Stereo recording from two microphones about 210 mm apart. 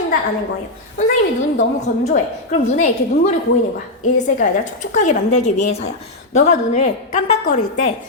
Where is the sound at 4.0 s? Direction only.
35° left (ahead or behind).